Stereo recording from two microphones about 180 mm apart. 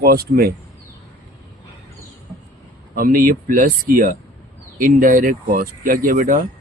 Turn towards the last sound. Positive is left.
turn(degrees=-50)  # may be behind; listen again after turning